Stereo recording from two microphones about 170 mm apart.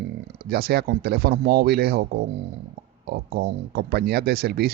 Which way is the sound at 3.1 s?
65° right (ahead or behind).